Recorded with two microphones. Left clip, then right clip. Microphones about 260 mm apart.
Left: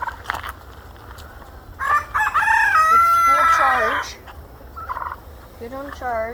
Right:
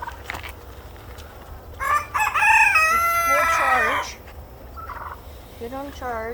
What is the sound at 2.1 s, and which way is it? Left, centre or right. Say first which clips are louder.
Chicken: right 2 dB; right.